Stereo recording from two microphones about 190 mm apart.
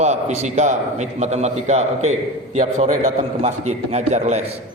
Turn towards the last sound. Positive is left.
turn(degrees=-35)  # may be behind; listen again after turning